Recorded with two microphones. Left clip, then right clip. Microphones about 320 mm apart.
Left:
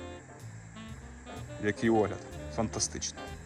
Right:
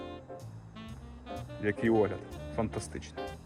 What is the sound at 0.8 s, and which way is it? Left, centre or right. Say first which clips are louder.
Music: even; centre.